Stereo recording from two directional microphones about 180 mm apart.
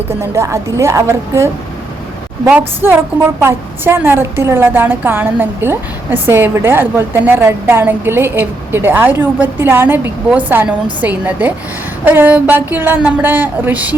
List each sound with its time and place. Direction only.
0.2 s a woman's voice: 15° right (ahead or behind)